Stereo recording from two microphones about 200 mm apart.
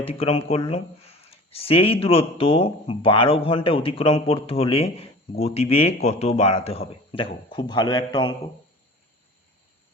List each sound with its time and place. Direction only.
0.0 s speech: 30° left (ahead or behind)